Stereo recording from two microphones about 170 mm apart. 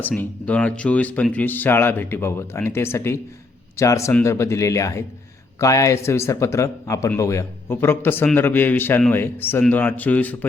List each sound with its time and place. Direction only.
0.0 s a man's voice: 10° left (ahead or behind)